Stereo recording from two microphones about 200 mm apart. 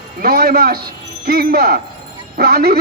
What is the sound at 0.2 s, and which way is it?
Speech, 50° right (ahead or behind).